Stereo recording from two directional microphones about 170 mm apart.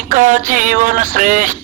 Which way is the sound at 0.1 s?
50° right (ahead or behind).